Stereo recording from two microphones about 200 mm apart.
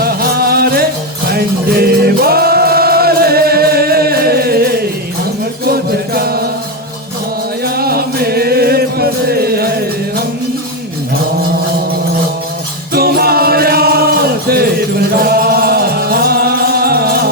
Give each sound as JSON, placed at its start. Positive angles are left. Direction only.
{"t": 0.0, "sound": "music", "side_deg": -50}
{"t": 5.6, "sound": "mantra", "side_deg": -50}
{"t": 7.6, "sound": "music", "side_deg": -50}
{"t": 12.9, "sound": "music", "side_deg": -50}